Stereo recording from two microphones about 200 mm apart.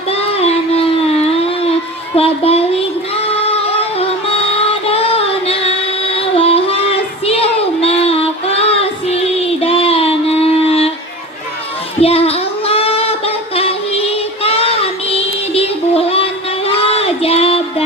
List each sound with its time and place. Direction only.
0.1 s a sound: 30° left (ahead or behind)
2.1 s speech: 30° left (ahead or behind)
3.8 s music: 30° left (ahead or behind)
7.3 s child singing: 30° left (ahead or behind)
11.9 s child singing: 30° left (ahead or behind)